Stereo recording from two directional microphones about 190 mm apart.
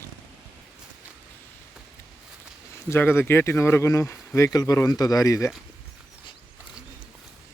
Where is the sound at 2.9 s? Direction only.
10° left (ahead or behind).